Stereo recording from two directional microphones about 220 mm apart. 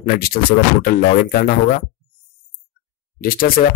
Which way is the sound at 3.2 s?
40° left (ahead or behind).